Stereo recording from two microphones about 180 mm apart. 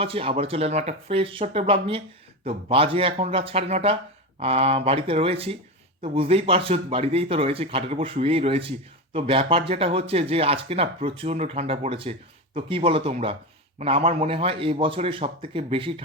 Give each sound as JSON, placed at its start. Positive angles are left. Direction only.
{"t": 0.0, "sound": "speech", "side_deg": -30}